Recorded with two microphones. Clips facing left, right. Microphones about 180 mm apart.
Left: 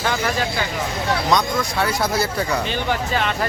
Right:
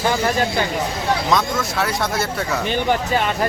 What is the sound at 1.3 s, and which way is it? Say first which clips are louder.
Speech: even; centre (ahead or behind).